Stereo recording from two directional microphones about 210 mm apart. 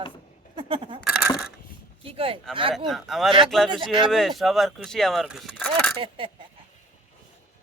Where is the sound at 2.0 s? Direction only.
25° right (ahead or behind).